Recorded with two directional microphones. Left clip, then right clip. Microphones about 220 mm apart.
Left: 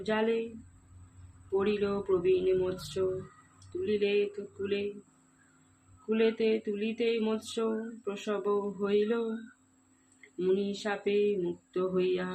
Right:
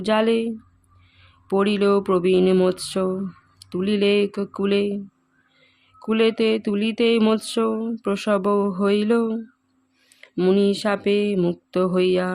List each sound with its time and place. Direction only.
0.0 s speech: 50° right (ahead or behind)
1.5 s speech: 50° right (ahead or behind)
6.1 s speech: 50° right (ahead or behind)
10.3 s speech: 50° right (ahead or behind)